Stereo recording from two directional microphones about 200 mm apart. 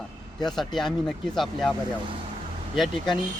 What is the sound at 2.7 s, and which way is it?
Speech, centre (ahead or behind).